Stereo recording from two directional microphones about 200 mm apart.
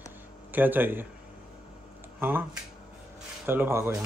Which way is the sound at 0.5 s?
10° right (ahead or behind).